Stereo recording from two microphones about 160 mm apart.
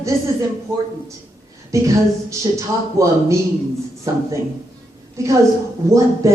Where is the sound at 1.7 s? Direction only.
20° right (ahead or behind).